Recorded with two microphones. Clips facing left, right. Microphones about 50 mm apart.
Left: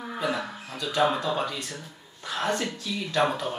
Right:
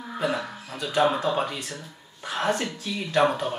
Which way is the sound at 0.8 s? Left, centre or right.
Right.